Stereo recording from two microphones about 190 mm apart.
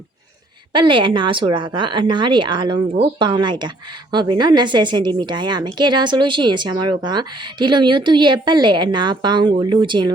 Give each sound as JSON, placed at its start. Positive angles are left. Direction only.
{"t": 0.7, "sound": "a woman's voice", "side_deg": -25}